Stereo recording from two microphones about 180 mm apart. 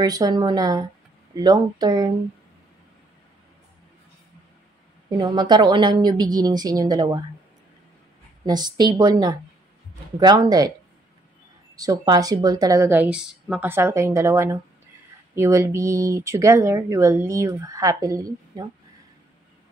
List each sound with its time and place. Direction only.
0.0 s a woman's voice: 20° right (ahead or behind)
5.1 s a woman's voice: 25° right (ahead or behind)
8.5 s a woman's voice: 25° right (ahead or behind)
11.7 s a woman's voice: 20° right (ahead or behind)